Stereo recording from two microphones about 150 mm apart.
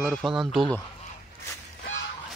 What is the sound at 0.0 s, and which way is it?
Speech, centre (ahead or behind).